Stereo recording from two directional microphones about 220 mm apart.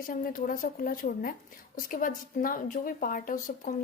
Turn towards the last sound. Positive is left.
turn(degrees=40)  # may be behind; listen again after turning